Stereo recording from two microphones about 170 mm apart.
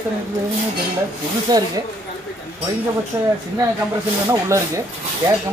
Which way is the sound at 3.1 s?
15° right (ahead or behind).